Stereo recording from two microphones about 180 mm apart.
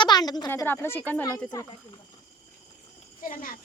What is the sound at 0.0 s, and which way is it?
A woman's voice, 25° left (ahead or behind).